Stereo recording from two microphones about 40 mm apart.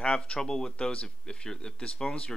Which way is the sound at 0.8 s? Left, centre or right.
Left.